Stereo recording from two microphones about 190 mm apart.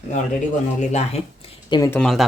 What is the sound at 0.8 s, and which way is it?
Speech, 35° left (ahead or behind).